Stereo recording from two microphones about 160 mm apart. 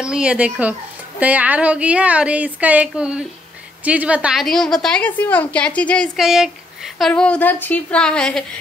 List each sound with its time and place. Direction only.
0.0 s a woman's voice: 5° right (ahead or behind)